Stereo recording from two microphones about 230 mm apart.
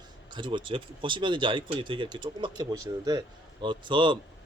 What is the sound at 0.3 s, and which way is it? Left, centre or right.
Speech, right.